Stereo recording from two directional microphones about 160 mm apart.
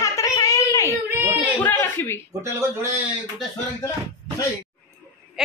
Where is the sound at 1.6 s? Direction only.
15° left (ahead or behind).